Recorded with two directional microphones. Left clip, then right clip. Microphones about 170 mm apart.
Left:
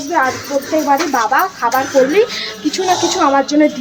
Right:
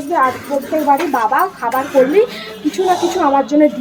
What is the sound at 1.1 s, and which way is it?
Speech, 5° right (ahead or behind).